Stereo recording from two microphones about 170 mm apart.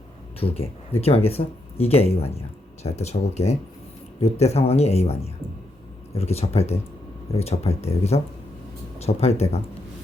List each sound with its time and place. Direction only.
0.3 s speech: 35° left (ahead or behind)